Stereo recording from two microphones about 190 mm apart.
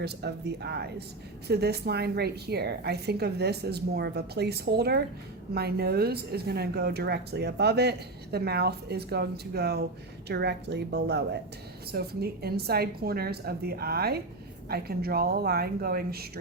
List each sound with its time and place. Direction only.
0.0 s speech: 60° right (ahead or behind)